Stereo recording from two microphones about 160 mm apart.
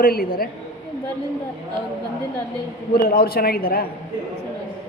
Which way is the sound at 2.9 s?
65° left (ahead or behind).